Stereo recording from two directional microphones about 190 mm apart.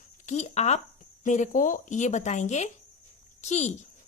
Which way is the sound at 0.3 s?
35° left (ahead or behind).